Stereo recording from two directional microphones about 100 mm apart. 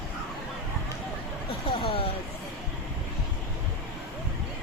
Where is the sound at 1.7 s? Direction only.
80° left.